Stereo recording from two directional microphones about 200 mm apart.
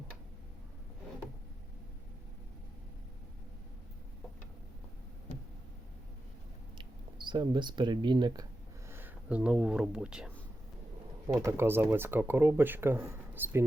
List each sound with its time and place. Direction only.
6.7 s speech: 25° right (ahead or behind)
8.9 s speech: 10° right (ahead or behind)
11.3 s speech: 15° right (ahead or behind)